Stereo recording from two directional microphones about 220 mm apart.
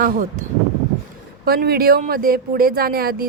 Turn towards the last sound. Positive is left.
turn(degrees=-45)  # may be behind; listen again after turning